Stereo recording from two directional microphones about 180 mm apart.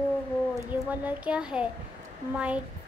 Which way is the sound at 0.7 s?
10° right (ahead or behind).